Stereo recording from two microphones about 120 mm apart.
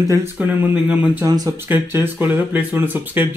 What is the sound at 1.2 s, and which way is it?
Speech, 30° right (ahead or behind).